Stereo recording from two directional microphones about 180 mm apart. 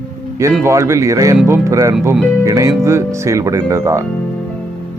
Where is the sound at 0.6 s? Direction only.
15° right (ahead or behind).